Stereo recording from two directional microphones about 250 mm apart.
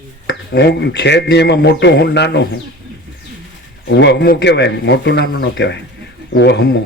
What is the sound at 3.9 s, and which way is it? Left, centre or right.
Speech, left.